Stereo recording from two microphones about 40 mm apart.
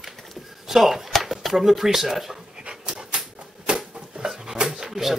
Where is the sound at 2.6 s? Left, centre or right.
Right.